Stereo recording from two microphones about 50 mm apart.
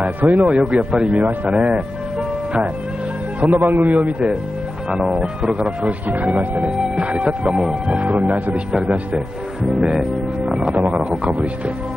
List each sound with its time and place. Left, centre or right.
0.0 s a man's voice: right
1.1 s a man's voice: right
1.5 s speech: right
3.3 s a man's voice: right
4.9 s speech: centre
5.9 s speech: right; by 7.7 s centre
7.9 s speech: right
9.1 s speech: centre
10.4 s speech: right